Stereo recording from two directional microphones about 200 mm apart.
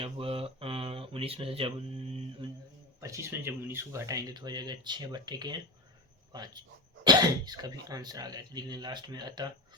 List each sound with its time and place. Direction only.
0.0 s speech: 30° right (ahead or behind)
3.0 s speech: 15° right (ahead or behind)